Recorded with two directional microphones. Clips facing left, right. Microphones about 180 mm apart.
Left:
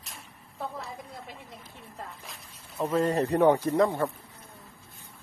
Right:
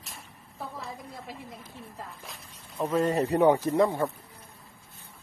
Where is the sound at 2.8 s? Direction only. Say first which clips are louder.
Even; 10° right (ahead or behind).